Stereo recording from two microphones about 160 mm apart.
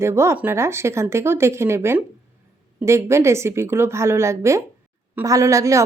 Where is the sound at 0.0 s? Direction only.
15° right (ahead or behind).